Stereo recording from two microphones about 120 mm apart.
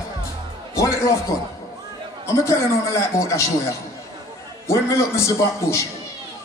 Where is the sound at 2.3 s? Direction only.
25° left (ahead or behind).